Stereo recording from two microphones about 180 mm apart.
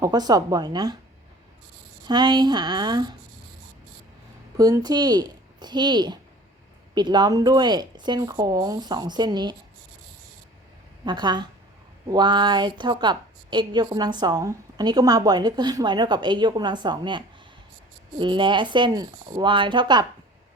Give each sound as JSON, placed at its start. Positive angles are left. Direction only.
{"t": 0.0, "sound": "a woman's voice", "side_deg": -20}
{"t": 2.0, "sound": "a woman's voice", "side_deg": -25}
{"t": 4.5, "sound": "a woman's voice", "side_deg": -20}
{"t": 11.0, "sound": "a woman's voice", "side_deg": -25}